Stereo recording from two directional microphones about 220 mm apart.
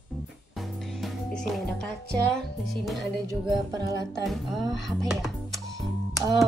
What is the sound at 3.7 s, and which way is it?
Music, 15° right (ahead or behind).